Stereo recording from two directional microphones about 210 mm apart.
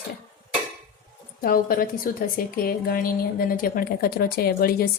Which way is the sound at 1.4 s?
45° left (ahead or behind).